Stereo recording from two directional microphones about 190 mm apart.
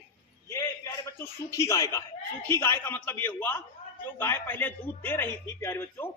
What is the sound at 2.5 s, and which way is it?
Speech, 15° left (ahead or behind).